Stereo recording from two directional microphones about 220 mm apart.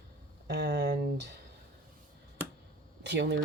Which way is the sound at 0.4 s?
50° right (ahead or behind).